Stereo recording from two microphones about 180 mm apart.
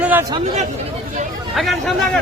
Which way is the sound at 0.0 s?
10° right (ahead or behind).